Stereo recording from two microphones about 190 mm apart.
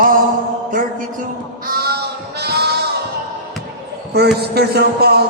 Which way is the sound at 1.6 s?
50° right (ahead or behind).